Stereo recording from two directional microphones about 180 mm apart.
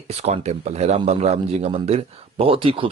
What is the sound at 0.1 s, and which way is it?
A man's voice, 35° right (ahead or behind).